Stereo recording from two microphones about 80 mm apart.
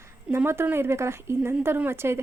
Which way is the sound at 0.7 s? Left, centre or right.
Right.